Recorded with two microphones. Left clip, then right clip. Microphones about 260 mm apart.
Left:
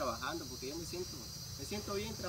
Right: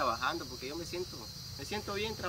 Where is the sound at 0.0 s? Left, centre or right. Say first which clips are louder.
Right 6 dB; centre.